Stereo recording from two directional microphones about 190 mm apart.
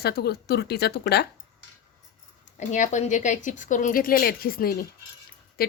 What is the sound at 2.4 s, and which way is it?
A woman's voice, 40° left (ahead or behind).